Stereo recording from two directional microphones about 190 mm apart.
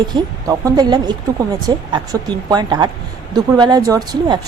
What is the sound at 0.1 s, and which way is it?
Speech, 20° right (ahead or behind).